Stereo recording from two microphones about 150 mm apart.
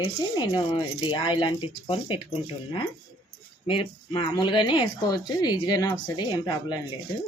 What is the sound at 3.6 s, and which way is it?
Speech, 35° left (ahead or behind).